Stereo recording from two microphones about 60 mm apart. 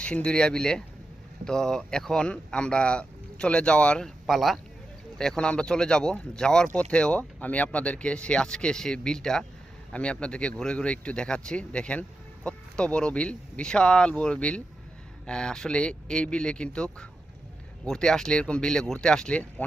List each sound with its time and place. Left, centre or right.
0.0 s speech: centre
4.0 s speech: centre